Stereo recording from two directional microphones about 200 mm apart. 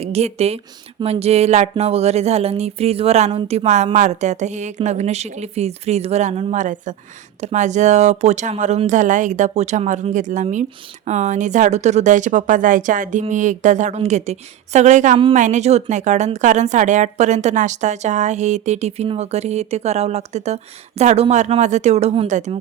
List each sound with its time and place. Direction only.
0.0 s speech: 30° right (ahead or behind)